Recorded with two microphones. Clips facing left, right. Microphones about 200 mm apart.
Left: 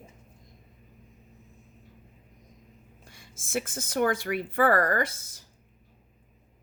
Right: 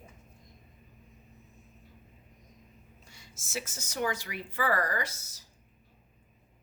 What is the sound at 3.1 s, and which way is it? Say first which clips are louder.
A woman's voice: left 11 dB; 55° left (ahead or behind).